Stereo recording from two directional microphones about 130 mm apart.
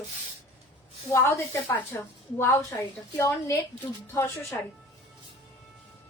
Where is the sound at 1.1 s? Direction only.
25° left (ahead or behind).